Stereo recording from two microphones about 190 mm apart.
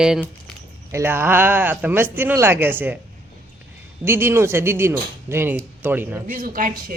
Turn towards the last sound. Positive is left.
turn(degrees=-50)  # may be behind; listen again after turning